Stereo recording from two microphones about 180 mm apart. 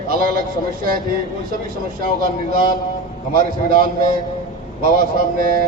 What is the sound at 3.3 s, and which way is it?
Speech, 55° right (ahead or behind).